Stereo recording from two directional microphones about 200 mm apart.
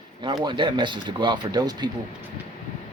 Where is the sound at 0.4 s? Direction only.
25° right (ahead or behind).